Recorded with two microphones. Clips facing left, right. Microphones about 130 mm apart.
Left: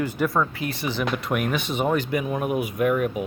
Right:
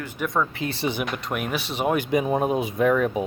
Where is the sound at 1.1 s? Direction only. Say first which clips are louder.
Left 3 dB; centre (ahead or behind).